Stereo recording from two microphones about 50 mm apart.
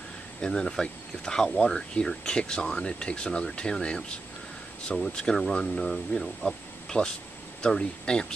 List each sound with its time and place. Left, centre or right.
0.4 s speech: centre